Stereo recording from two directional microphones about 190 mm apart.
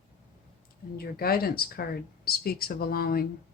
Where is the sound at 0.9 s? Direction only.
55° left (ahead or behind).